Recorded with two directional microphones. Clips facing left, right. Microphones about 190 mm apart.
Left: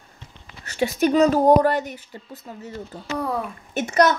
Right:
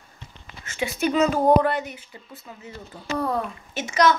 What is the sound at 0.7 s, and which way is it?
Speech, 40° left (ahead or behind).